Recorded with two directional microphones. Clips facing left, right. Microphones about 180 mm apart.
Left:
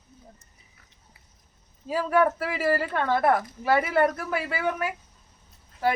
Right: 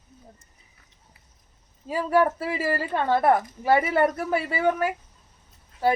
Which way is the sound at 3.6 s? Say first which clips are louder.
Left 1 dB; 20° right (ahead or behind).